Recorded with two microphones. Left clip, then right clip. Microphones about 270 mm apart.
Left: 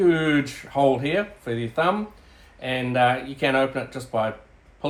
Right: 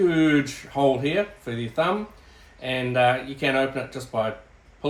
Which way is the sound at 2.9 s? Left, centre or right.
Centre.